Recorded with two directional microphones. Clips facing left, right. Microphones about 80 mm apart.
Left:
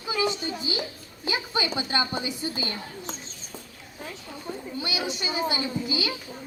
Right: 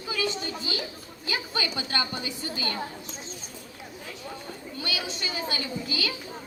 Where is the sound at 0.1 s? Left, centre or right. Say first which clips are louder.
Left 3 dB; left.